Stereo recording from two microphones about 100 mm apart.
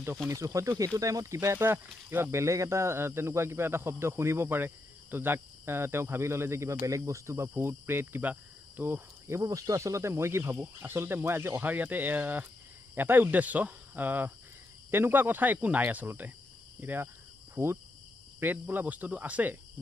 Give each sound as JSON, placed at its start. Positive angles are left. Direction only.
{"t": 0.3, "sound": "speech", "side_deg": -35}